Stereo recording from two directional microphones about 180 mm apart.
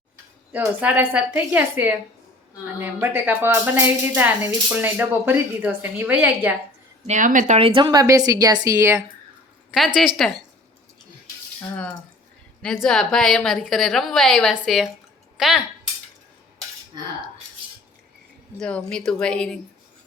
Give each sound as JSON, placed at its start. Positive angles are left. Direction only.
{"t": 0.5, "sound": "speech", "side_deg": -10}
{"t": 7.1, "sound": "speech", "side_deg": -45}
{"t": 9.7, "sound": "a woman's voice", "side_deg": 0}
{"t": 11.6, "sound": "a woman's voice", "side_deg": 5}
{"t": 18.6, "sound": "a woman's voice", "side_deg": 5}